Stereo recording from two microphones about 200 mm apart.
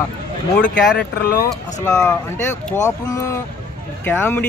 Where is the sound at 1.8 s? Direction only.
15° left (ahead or behind).